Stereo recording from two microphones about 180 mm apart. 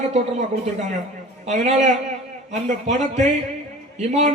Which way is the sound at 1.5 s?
40° right (ahead or behind).